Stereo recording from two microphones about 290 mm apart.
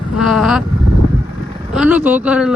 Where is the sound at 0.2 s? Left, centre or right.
Centre.